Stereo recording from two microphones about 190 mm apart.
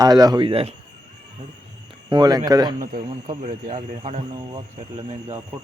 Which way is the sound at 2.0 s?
20° right (ahead or behind).